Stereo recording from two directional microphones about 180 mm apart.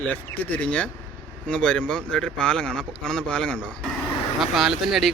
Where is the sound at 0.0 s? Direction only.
10° left (ahead or behind).